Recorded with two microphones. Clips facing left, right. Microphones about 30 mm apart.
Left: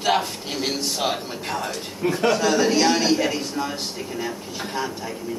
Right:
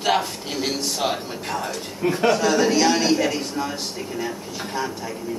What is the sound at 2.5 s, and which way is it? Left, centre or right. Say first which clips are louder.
A man's voice: even; left.